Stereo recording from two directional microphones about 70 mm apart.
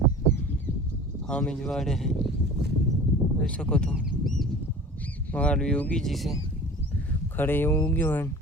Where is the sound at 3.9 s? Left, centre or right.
Centre.